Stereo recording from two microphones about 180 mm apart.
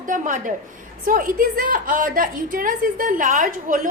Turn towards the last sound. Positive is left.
turn(degrees=-50)  # may be behind; listen again after turning